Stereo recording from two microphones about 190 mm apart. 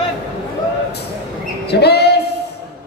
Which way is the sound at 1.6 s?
60° left (ahead or behind).